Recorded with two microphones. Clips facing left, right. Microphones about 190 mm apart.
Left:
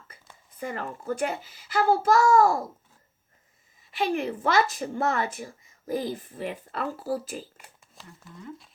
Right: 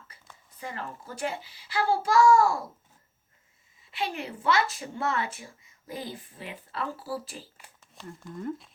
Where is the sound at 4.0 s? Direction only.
50° left (ahead or behind).